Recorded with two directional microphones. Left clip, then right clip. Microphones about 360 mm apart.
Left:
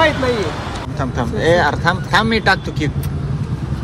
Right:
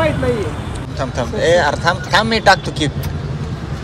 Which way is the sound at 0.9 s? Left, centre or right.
Centre.